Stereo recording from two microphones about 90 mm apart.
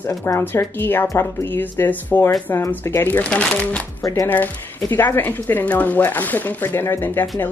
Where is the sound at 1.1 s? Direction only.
35° left (ahead or behind).